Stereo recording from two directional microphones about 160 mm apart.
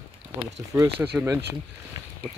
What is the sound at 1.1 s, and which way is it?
Speech, 5° right (ahead or behind).